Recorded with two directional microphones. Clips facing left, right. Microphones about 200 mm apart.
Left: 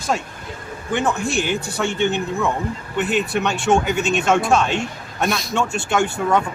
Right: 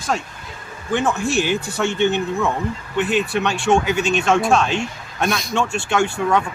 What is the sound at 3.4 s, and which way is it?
Speech, centre (ahead or behind).